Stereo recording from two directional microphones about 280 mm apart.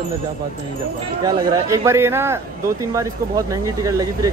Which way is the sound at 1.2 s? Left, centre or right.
Centre.